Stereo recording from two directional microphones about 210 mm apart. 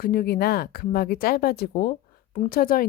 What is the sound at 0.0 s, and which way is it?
Speech, 45° left (ahead or behind).